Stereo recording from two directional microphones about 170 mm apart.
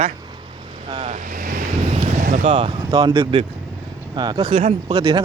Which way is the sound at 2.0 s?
45° right (ahead or behind).